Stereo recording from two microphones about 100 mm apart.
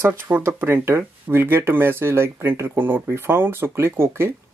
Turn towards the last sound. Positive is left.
turn(degrees=-25)  # may be behind; listen again after turning